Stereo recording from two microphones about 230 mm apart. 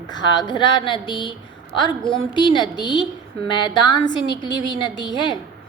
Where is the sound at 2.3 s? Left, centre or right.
Centre.